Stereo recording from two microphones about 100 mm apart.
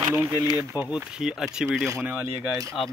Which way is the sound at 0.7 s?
15° right (ahead or behind).